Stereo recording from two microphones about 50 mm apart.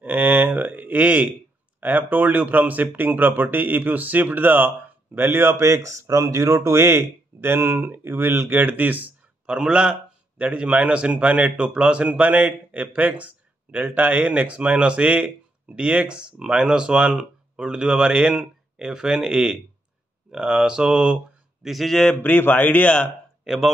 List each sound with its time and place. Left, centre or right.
0.0 s a sound: right
1.8 s speech: right
5.6 s speech: right
8.5 s speech: right
9.5 s speech: centre
21.6 s speech: centre
22.2 s speech: left
23.4 s speech: centre